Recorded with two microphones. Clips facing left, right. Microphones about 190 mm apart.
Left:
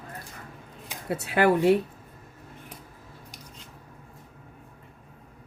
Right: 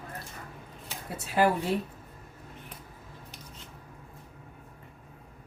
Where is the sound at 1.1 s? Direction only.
65° left (ahead or behind).